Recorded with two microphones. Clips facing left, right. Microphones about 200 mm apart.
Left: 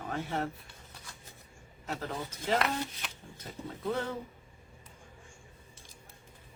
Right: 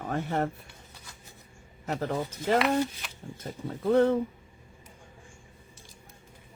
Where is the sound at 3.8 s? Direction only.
55° right (ahead or behind).